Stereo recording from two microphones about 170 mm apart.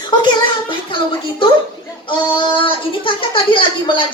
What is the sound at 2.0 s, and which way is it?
Speech, 30° left (ahead or behind).